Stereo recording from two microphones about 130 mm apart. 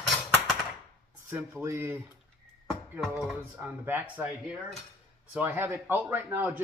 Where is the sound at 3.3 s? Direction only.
10° right (ahead or behind).